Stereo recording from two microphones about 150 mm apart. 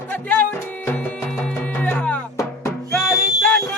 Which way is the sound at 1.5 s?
10° left (ahead or behind).